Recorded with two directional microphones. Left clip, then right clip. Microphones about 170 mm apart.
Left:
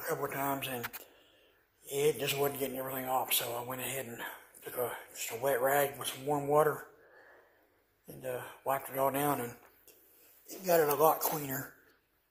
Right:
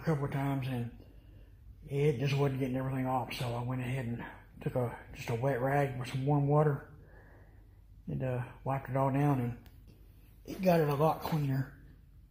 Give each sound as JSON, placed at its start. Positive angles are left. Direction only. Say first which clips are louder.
{"t": 0.0, "sound": "speech", "louder": "left 1 dB", "side_deg": 0}
{"t": 1.9, "sound": "speech", "louder": "left 2 dB", "side_deg": 0}
{"t": 8.3, "sound": "speech", "louder": "left 3 dB", "side_deg": -5}
{"t": 10.6, "sound": "speech", "louder": "left 2 dB", "side_deg": 0}